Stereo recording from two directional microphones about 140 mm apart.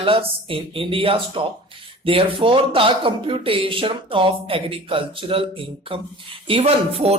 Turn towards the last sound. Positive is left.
turn(degrees=-45)  # may be behind; listen again after turning